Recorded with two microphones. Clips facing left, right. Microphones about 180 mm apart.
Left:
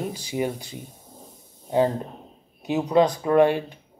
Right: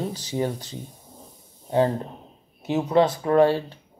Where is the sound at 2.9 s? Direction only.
20° left (ahead or behind).